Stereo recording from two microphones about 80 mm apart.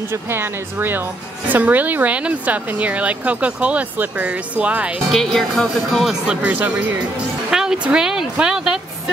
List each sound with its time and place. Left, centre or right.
0.3 s speech: right
5.1 s speech: centre
6.2 s speech: centre